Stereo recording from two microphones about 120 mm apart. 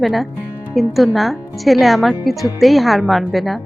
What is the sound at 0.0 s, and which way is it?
A woman's voice, centre (ahead or behind).